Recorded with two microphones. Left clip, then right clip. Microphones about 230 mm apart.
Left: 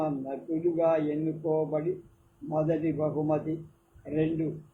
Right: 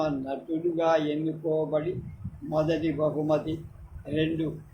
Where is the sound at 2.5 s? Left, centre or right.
Right.